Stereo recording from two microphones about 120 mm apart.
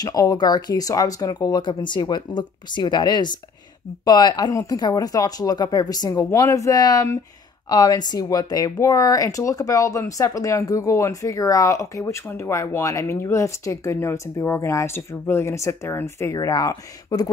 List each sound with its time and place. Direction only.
0.0 s speech: 30° left (ahead or behind)